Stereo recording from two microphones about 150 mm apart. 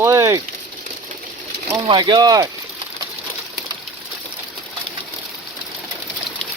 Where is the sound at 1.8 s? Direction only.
30° right (ahead or behind).